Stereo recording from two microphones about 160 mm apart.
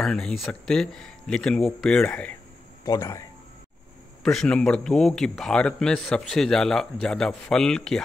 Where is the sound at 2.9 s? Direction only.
20° left (ahead or behind).